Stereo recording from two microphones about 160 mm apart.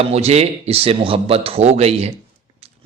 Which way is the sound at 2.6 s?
40° right (ahead or behind).